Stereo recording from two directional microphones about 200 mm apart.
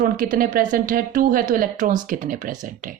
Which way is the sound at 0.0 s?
45° right (ahead or behind).